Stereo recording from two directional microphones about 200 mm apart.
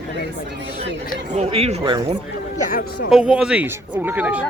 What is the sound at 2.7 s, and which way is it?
Speech, 50° left (ahead or behind).